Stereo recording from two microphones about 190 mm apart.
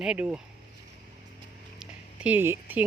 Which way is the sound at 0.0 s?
5° right (ahead or behind).